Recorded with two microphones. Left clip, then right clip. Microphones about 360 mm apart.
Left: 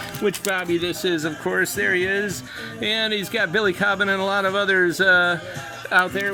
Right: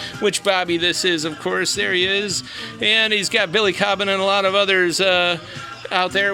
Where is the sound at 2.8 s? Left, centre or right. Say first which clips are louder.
Right 6 dB; right.